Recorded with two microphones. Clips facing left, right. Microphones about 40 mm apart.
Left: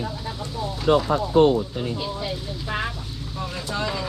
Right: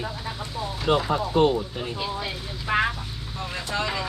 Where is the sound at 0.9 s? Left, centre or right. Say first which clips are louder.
Left 3 dB; centre.